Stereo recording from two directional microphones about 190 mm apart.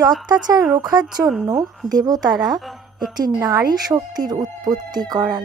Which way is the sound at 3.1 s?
20° right (ahead or behind).